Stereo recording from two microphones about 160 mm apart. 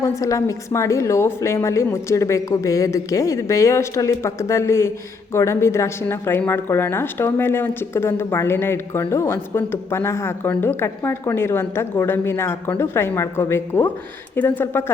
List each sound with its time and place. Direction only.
0.0 s a woman's voice: 20° left (ahead or behind)